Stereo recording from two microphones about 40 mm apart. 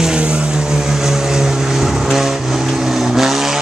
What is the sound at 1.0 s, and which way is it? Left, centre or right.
Vehicle, centre.